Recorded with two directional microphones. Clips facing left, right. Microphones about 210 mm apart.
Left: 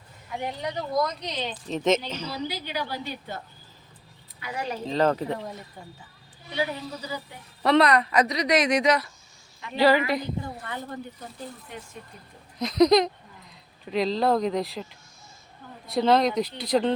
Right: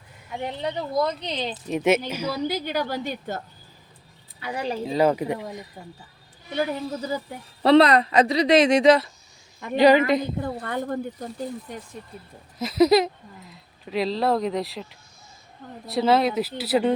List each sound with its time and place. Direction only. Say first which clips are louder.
0.6 s speech: right 3 dB; 30° right (ahead or behind)
1.6 s speech: right 2 dB; 10° right (ahead or behind)
2.5 s a woman's voice: right 6 dB; 45° right (ahead or behind)
4.4 s speech: right 3 dB; 30° right (ahead or behind)
4.9 s speech: right 2 dB; 10° right (ahead or behind)
6.6 s a woman's voice: right 4 dB; 50° right (ahead or behind)
7.6 s speech: right 4 dB; 30° right (ahead or behind)
9.7 s speech: right 4 dB; 20° right (ahead or behind)
10.4 s a woman's voice: right 7 dB; 55° right (ahead or behind)
12.5 s speech: right 1 dB; 5° right (ahead or behind)